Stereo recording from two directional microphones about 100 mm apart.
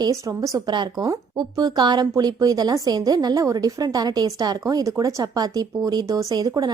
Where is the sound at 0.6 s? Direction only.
45° right (ahead or behind).